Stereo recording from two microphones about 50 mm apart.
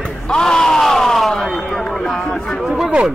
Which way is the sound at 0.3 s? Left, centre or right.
Centre.